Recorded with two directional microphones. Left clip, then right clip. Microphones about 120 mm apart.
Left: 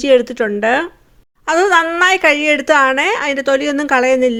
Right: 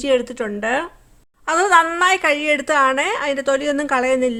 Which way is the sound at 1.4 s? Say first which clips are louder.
Left 2 dB; 25° left (ahead or behind).